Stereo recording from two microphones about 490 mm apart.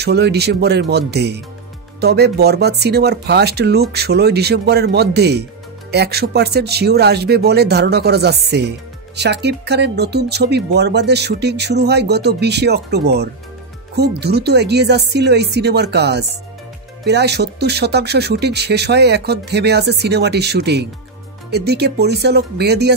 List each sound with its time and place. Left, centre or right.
0.0 s speech: centre